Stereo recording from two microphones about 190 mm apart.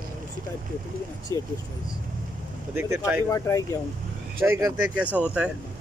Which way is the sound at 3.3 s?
15° left (ahead or behind).